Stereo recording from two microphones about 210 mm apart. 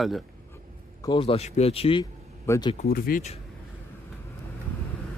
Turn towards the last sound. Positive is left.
turn(degrees=45)  # may be behind; listen again after turning